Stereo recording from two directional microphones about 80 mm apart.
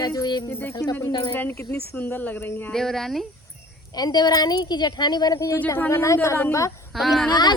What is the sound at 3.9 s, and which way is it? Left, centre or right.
Speech, left.